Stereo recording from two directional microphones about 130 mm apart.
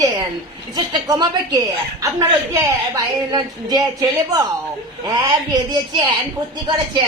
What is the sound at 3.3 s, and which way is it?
Speech, 30° right (ahead or behind).